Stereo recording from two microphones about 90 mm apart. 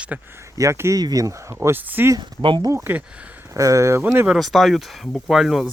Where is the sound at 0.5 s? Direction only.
35° right (ahead or behind).